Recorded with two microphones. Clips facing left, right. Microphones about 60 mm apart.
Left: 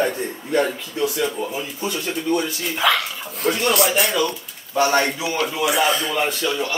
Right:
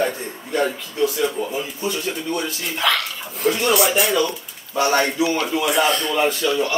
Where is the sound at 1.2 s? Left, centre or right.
Centre.